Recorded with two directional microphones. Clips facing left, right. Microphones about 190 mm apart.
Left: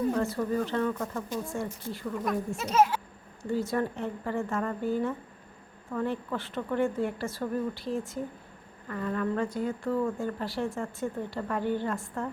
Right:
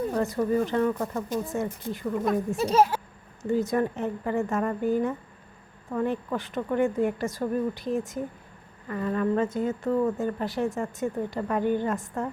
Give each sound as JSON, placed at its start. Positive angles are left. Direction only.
{"t": 0.2, "sound": "a woman's voice", "side_deg": -15}
{"t": 2.6, "sound": "a child's voice", "side_deg": -35}
{"t": 3.5, "sound": "a woman's voice", "side_deg": -15}